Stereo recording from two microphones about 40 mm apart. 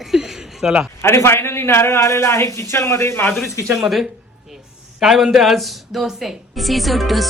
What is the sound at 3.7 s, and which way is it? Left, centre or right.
A woman's voice, centre.